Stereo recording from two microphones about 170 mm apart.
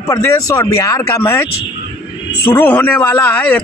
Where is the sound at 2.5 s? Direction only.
10° left (ahead or behind).